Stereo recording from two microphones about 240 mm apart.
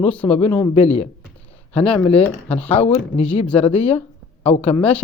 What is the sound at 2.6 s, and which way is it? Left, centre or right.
Speech, left.